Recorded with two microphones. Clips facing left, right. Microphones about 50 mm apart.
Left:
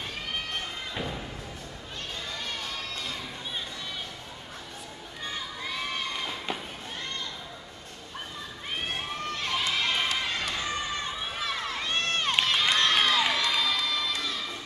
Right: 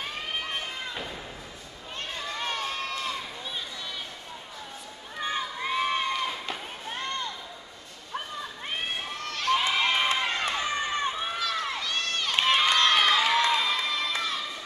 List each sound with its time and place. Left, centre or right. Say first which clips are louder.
2.3 s crowd: right 7 dB; right
5.2 s crowd: right 6 dB; right
9.6 s run: even; right
11.3 s run: right 2 dB; left
12.4 s crowd: right 6 dB; right